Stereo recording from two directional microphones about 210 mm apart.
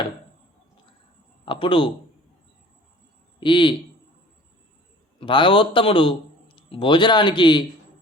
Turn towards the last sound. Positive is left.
turn(degrees=20)  # may be behind; listen again after turning